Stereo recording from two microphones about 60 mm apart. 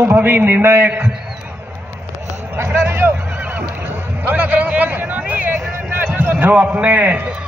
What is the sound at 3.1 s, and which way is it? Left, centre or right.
Neigh, right.